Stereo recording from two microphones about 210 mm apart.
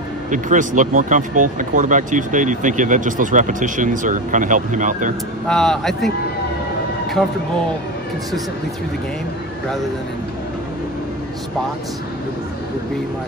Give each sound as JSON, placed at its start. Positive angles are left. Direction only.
{"t": 0.3, "sound": "speech", "side_deg": -35}
{"t": 5.5, "sound": "speech", "side_deg": 0}